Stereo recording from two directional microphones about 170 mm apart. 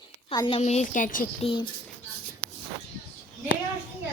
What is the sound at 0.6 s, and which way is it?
Speech, 40° left (ahead or behind).